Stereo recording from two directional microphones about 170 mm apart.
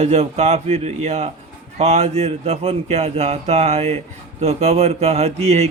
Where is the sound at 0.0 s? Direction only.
40° right (ahead or behind).